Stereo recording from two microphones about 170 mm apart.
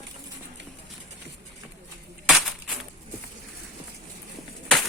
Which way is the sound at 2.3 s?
Centre (ahead or behind).